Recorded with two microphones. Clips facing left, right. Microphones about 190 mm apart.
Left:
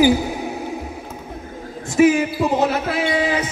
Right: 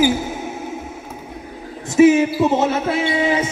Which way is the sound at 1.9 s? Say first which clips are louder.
Right 3 dB; 20° right (ahead or behind).